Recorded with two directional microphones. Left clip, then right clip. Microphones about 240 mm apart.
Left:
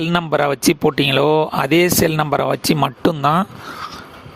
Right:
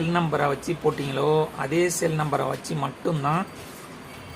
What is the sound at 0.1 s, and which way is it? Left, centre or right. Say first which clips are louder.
Speech: left 6 dB; left.